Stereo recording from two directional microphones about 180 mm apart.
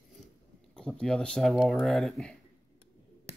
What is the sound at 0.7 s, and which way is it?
Speech, 5° left (ahead or behind).